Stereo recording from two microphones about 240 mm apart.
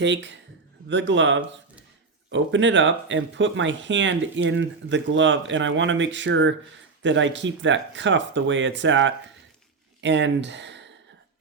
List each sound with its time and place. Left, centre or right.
0.0 s speech: right